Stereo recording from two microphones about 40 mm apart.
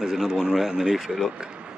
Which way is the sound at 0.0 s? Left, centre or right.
Centre.